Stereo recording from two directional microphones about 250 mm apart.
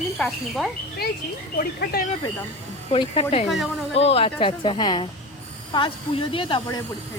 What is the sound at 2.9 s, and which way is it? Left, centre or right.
Speech, left.